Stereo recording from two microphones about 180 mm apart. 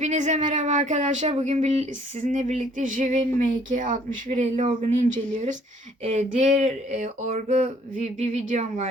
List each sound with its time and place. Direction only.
0.0 s speech: 40° right (ahead or behind)